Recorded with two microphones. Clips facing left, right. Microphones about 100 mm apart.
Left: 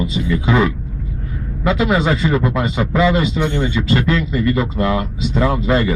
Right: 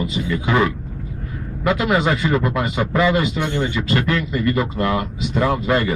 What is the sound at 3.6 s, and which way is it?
A man's voice, 20° left (ahead or behind).